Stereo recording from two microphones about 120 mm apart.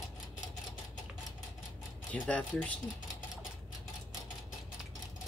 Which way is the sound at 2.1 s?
10° left (ahead or behind).